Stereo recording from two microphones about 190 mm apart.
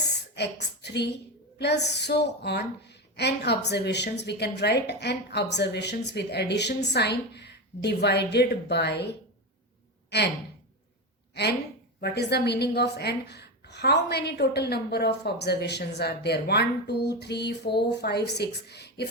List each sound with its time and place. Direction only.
0.0 s a woman's voice: 60° left (ahead or behind)
10.1 s sigh: 60° left (ahead or behind)
11.9 s a woman's voice: 60° left (ahead or behind)